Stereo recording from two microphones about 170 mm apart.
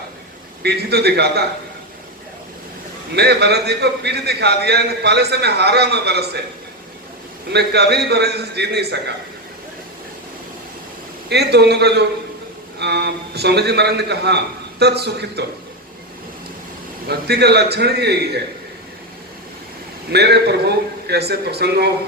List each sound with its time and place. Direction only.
0.6 s a man's voice: 75° right (ahead or behind)
3.2 s a man's voice: 75° right (ahead or behind)
7.5 s a man's voice: 75° right (ahead or behind)
11.3 s a man's voice: 75° right (ahead or behind)
17.1 s a man's voice: 70° right (ahead or behind)
20.1 s a man's voice: 75° right (ahead or behind)